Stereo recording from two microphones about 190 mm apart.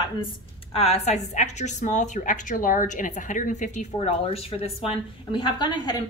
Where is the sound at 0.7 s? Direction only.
30° left (ahead or behind).